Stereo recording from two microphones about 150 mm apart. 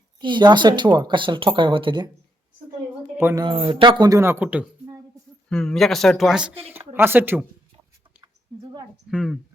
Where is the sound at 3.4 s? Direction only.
35° right (ahead or behind); by 4.9 s 10° right (ahead or behind).